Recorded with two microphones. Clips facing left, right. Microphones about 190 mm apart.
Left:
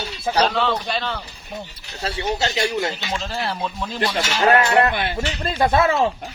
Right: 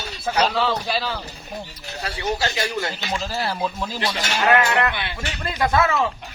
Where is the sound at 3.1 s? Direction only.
5° right (ahead or behind).